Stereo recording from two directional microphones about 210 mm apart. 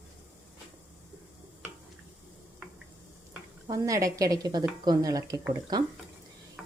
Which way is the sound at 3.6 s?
15° right (ahead or behind).